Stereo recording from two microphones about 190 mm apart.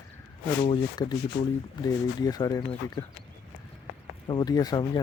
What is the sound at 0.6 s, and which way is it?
Speech, 25° left (ahead or behind).